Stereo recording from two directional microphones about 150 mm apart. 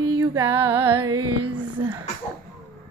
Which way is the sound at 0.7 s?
35° right (ahead or behind).